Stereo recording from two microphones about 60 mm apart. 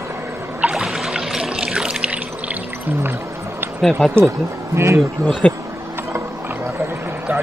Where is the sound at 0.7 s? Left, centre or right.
Centre.